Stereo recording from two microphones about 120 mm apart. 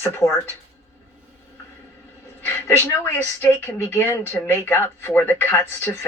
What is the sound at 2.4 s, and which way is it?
A woman's voice, 20° left (ahead or behind).